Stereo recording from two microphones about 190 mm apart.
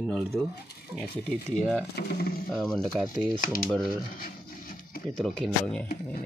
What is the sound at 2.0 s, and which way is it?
Speech, 55° left (ahead or behind).